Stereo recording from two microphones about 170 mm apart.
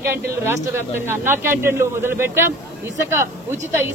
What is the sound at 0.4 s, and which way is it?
Speech, 15° right (ahead or behind).